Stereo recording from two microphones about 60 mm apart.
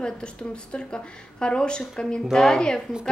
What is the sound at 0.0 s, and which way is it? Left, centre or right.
Speech, centre.